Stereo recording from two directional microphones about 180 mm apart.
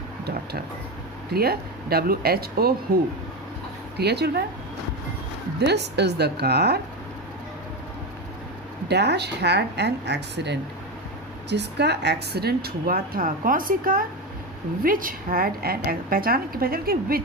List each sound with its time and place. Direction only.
1.3 s a woman's voice: 60° right (ahead or behind)
5.5 s a woman's voice: 65° right (ahead or behind)
8.9 s a woman's voice: 70° right (ahead or behind)